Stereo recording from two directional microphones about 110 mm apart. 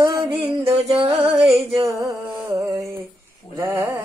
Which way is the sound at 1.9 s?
30° right (ahead or behind).